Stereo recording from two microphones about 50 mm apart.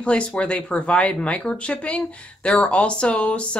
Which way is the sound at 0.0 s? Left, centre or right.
Left.